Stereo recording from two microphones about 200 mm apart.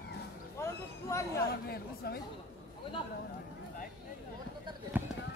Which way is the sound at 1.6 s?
50° left (ahead or behind).